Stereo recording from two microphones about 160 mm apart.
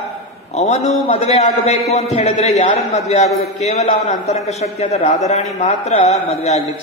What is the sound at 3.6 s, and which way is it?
A man's voice, 45° left (ahead or behind).